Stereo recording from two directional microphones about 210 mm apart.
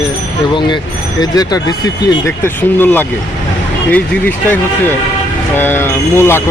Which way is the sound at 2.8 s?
10° left (ahead or behind).